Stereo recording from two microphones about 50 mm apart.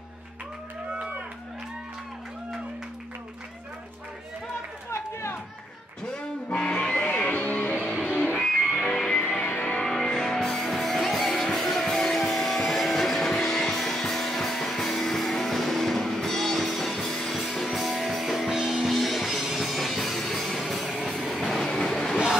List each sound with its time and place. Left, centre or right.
6.1 s music: centre
7.0 s music: left
8.5 s music: centre
9.5 s music: left
9.8 s music: centre
21.2 s train: centre